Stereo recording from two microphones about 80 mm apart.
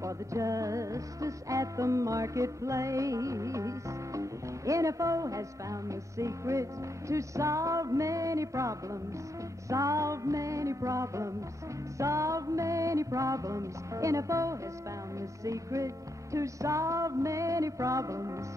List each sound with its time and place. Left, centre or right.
0.0 s music: right